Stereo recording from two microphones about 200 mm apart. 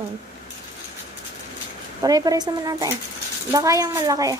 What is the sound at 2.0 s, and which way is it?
Speech, 20° right (ahead or behind).